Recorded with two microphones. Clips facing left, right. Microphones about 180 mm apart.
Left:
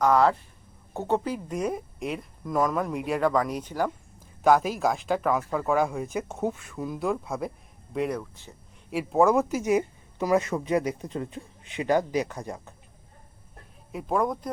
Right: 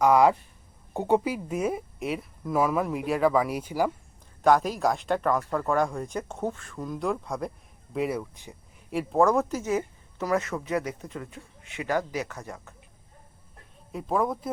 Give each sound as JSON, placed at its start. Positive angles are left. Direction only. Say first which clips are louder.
{"t": 0.0, "sound": "speech", "louder": "right 1 dB", "side_deg": -10}
{"t": 4.4, "sound": "speech", "louder": "even", "side_deg": 5}
{"t": 8.9, "sound": "speech", "louder": "left 1 dB", "side_deg": 5}
{"t": 11.0, "sound": "speech", "louder": "left 5 dB", "side_deg": 30}
{"t": 13.9, "sound": "speech", "louder": "even", "side_deg": 0}